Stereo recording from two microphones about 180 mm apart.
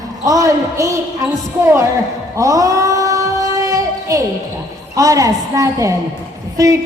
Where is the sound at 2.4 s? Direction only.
20° right (ahead or behind).